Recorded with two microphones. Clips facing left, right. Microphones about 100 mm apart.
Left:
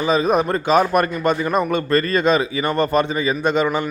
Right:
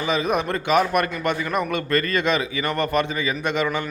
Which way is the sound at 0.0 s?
30° left (ahead or behind).